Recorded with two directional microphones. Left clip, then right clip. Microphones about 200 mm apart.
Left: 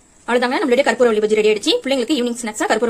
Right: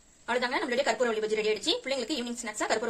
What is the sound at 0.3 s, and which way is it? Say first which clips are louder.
Speech: left 12 dB; 35° left (ahead or behind).